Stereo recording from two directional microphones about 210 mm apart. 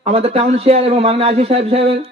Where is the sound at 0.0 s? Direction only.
30° right (ahead or behind).